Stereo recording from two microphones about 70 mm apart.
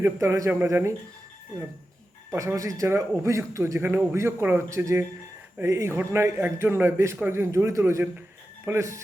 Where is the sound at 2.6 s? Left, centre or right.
Right.